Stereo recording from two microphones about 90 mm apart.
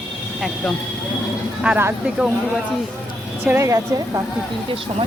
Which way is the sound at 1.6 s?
10° right (ahead or behind).